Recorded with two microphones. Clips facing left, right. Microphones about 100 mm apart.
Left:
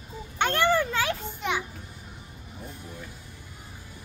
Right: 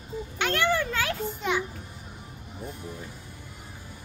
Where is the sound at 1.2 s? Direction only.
5° left (ahead or behind).